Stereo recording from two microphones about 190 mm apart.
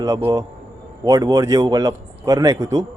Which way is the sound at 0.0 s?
20° right (ahead or behind).